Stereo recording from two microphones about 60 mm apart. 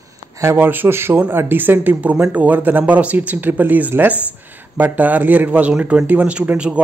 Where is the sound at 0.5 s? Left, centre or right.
Right.